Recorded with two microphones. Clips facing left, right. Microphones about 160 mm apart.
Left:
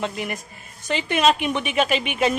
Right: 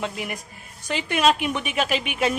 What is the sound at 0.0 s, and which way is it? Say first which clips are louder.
A woman's voice: left 2 dB; 5° right (ahead or behind).